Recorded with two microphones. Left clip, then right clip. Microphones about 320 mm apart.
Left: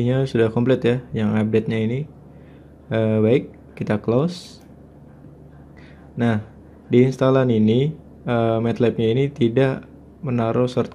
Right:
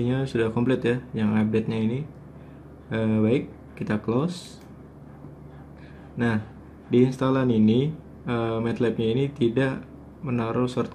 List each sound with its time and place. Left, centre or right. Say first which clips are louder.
0.0 s speech: left 6 dB; centre
6.1 s speech: left 4 dB; centre